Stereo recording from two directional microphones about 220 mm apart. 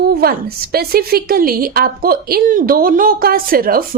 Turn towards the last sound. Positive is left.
turn(degrees=-40)  # may be behind; listen again after turning